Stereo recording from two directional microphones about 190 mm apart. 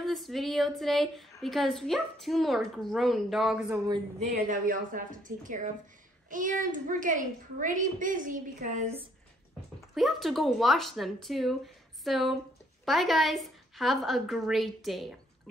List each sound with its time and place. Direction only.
0.0 s a woman's voice: centre (ahead or behind)
3.7 s speech: 20° right (ahead or behind)
4.2 s a woman's voice: 45° right (ahead or behind)
9.8 s a woman's voice: centre (ahead or behind)